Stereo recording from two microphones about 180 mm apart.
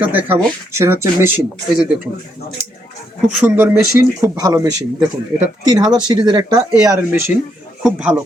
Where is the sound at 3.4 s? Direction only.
10° right (ahead or behind).